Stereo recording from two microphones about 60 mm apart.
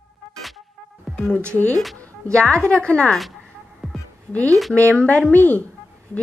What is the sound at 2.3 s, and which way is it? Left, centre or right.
Speech, centre.